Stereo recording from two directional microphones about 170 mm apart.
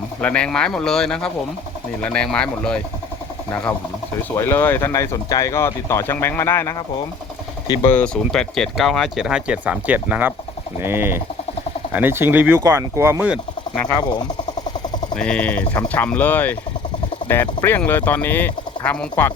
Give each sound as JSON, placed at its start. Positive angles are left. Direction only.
{"t": 0.2, "sound": "speech", "side_deg": 5}
{"t": 7.9, "sound": "speech", "side_deg": 10}
{"t": 13.8, "sound": "speech", "side_deg": 25}
{"t": 15.1, "sound": "speech", "side_deg": 5}